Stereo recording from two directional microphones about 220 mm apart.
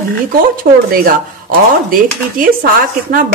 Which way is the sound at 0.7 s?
45° right (ahead or behind).